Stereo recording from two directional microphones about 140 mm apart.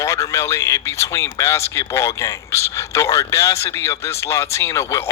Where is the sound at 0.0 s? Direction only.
20° left (ahead or behind).